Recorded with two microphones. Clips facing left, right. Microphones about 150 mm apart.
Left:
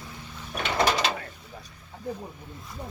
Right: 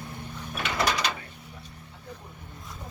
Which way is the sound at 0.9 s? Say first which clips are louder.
Left 3 dB; 25° left (ahead or behind).